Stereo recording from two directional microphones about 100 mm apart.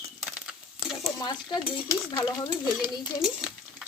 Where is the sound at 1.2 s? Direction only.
40° left (ahead or behind).